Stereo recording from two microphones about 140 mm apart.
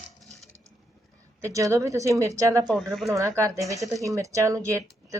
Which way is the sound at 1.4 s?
20° right (ahead or behind).